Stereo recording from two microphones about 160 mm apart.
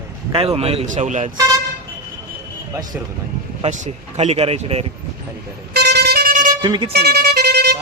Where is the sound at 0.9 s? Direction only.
50° right (ahead or behind).